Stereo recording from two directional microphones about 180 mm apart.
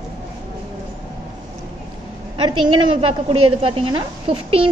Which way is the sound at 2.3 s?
30° right (ahead or behind).